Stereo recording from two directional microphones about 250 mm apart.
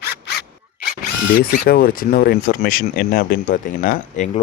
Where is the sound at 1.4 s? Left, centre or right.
Left.